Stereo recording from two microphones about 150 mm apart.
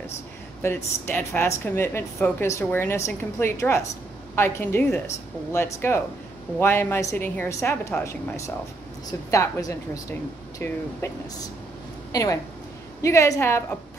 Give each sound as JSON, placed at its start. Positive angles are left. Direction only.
{"t": 0.6, "sound": "a woman's voice", "side_deg": 15}